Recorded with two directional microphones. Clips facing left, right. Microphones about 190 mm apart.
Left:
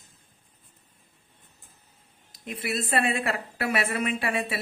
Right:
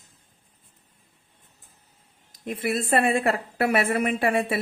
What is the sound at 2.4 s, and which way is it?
A woman's voice, 45° right (ahead or behind).